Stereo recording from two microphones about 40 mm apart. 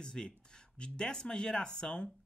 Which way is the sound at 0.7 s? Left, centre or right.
Left.